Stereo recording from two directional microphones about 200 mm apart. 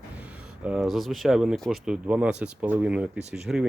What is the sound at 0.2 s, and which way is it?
Speech, 5° right (ahead or behind).